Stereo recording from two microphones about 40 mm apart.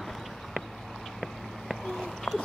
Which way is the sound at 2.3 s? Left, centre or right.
Left.